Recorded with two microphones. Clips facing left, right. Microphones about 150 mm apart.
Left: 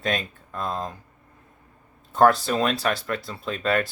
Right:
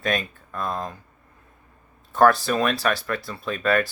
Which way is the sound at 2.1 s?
30° left (ahead or behind).